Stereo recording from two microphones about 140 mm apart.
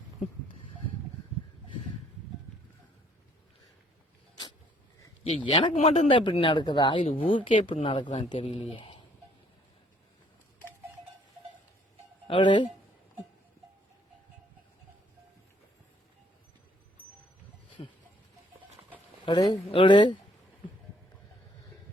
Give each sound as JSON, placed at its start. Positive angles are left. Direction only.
{"t": 5.5, "sound": "speech", "side_deg": 40}
{"t": 5.7, "sound": "speech", "side_deg": 50}
{"t": 12.3, "sound": "speech", "side_deg": 35}
{"t": 17.8, "sound": "a sound", "side_deg": 45}
{"t": 19.2, "sound": "speech", "side_deg": 30}
{"t": 19.7, "sound": "speech", "side_deg": 35}